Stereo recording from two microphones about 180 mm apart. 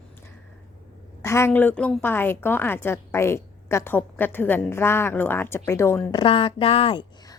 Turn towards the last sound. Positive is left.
turn(degrees=30)  # may be behind; listen again after turning